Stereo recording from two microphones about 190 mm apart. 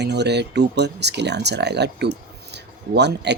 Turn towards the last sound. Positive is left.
turn(degrees=-60)  # may be behind; listen again after turning